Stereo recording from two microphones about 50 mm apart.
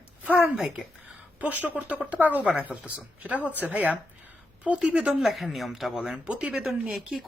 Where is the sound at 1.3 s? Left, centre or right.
Right.